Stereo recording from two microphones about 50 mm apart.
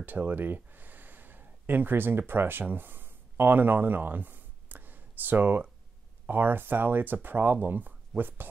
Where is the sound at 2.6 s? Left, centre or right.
Right.